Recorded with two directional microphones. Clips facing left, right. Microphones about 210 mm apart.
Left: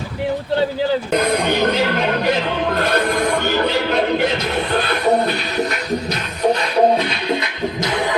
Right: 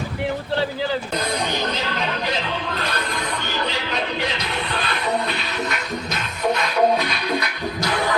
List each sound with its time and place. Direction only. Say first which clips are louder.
1.1 s music: left 7 dB; 60° left (ahead or behind); by 8.1 s 20° left (ahead or behind)